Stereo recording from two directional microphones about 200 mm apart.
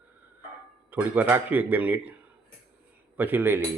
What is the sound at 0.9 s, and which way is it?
Speech, 10° right (ahead or behind).